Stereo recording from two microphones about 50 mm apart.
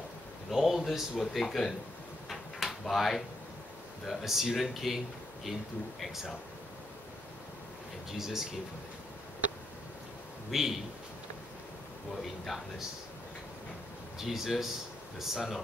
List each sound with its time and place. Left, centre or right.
0.5 s speech: centre
2.8 s speech: centre
8.2 s speech: centre
10.5 s speech: centre
12.5 s speech: centre
14.1 s speech: centre